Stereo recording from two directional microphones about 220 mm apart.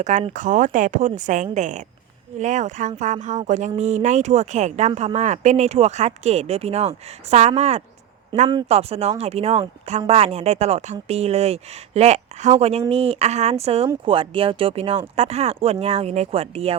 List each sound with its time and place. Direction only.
0.0 s speech: 30° right (ahead or behind)